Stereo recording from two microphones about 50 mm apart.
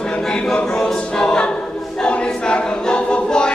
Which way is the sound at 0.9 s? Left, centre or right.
Centre.